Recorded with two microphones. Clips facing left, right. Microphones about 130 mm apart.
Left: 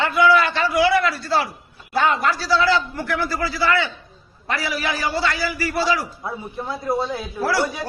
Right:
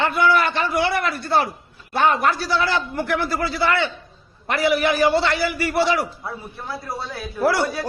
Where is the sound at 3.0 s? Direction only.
25° right (ahead or behind).